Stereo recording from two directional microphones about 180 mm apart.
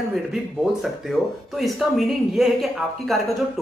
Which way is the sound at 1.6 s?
Centre (ahead or behind).